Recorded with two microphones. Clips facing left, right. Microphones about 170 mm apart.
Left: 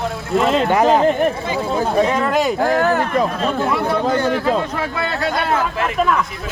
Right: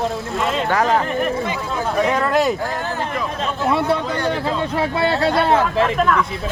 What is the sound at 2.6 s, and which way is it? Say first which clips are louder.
Speech: left 8 dB; 75° left (ahead or behind).